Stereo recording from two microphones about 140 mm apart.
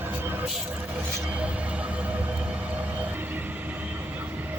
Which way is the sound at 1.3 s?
10° right (ahead or behind).